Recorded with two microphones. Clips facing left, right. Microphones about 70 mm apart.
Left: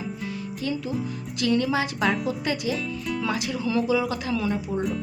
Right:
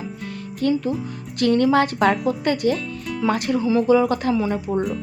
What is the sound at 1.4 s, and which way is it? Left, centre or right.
Speech, right.